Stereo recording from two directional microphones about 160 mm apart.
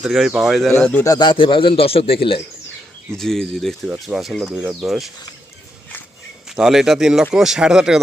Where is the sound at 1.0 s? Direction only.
25° left (ahead or behind).